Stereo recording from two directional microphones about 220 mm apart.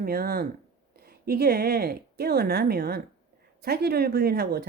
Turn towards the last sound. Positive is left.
turn(degrees=-45)  # may be behind; listen again after turning